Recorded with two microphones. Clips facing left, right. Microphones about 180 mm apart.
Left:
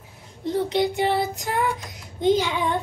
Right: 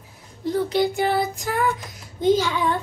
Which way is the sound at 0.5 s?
20° left (ahead or behind).